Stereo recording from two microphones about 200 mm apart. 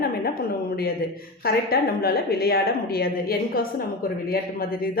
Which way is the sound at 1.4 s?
50° left (ahead or behind).